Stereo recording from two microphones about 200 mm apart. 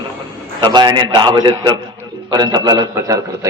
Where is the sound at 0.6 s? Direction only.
20° right (ahead or behind).